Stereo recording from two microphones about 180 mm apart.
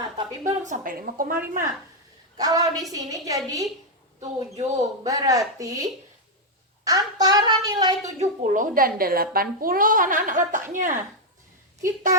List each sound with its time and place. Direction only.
0.4 s a woman's voice: 45° right (ahead or behind)
2.4 s a woman's voice: 20° right (ahead or behind)
4.2 s a man's voice: 35° right (ahead or behind)
4.8 s a woman's voice: 20° right (ahead or behind)
8.0 s a woman's voice: 40° right (ahead or behind)